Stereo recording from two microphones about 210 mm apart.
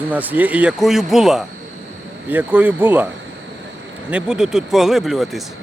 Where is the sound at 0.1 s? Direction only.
10° right (ahead or behind).